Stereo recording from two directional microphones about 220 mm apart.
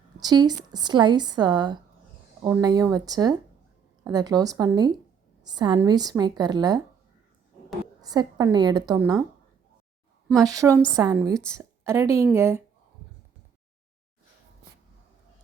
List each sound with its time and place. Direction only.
0.2 s a woman's voice: 20° right (ahead or behind)
8.0 s a woman's voice: 15° right (ahead or behind)
10.4 s a woman's voice: 15° right (ahead or behind)